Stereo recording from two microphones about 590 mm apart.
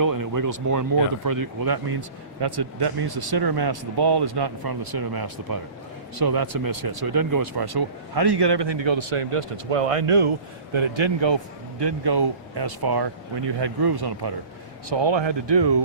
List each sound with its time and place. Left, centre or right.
0.0 s speech: right